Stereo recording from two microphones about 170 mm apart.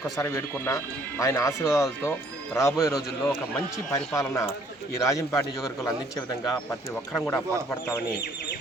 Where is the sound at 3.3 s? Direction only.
10° left (ahead or behind).